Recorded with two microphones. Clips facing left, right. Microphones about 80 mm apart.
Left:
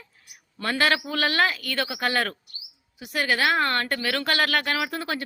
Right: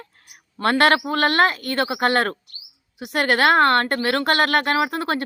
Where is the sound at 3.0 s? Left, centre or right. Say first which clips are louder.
Right 5 dB; right.